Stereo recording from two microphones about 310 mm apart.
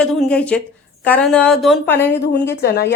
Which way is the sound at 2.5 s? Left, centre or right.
Left.